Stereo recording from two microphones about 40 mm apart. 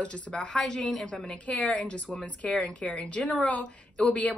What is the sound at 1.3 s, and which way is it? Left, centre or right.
A woman's voice, left.